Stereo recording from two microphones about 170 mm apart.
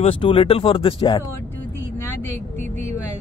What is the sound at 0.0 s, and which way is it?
A man's voice, 30° left (ahead or behind).